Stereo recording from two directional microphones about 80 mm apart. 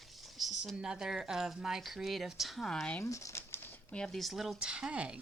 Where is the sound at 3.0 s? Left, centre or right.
Left.